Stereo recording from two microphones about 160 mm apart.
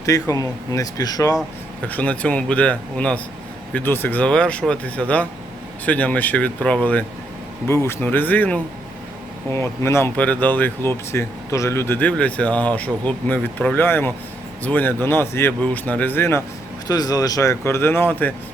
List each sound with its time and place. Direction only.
0.0 s speech: 20° left (ahead or behind)
1.9 s speech: 10° left (ahead or behind)
16.8 s speech: 25° left (ahead or behind)